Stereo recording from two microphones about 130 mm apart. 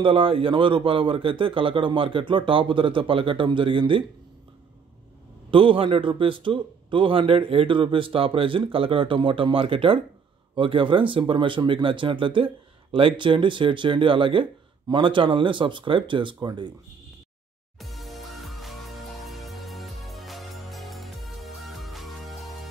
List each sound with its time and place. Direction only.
0.0 s speech: 45° right (ahead or behind)
5.5 s speech: 40° right (ahead or behind)
17.7 s music: centre (ahead or behind)